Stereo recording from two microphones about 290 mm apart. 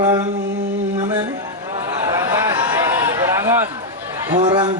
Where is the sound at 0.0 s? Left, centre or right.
Centre.